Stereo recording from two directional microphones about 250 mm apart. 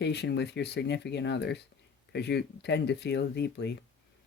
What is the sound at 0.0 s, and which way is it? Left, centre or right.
Speech, left.